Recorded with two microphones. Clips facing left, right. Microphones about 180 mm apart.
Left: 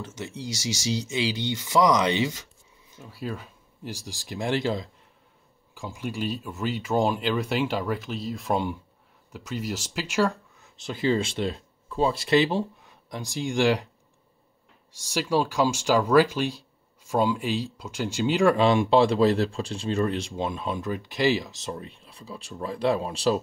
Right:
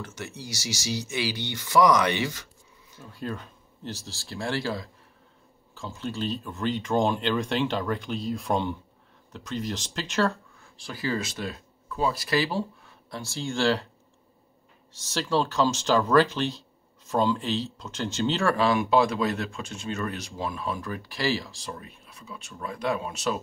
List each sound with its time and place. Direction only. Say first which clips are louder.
0.0 s speech: left 3 dB; 25° left (ahead or behind)
3.1 s speech: even; 5° left (ahead or behind)
10.6 s speech: left 6 dB; 25° left (ahead or behind)
14.9 s speech: left 2 dB; 10° left (ahead or behind); by 23.4 s 30° left (ahead or behind)